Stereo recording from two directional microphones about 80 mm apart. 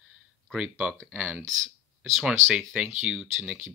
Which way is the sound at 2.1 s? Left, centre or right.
Centre.